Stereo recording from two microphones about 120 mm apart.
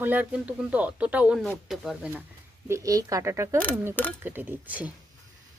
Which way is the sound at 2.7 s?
25° right (ahead or behind).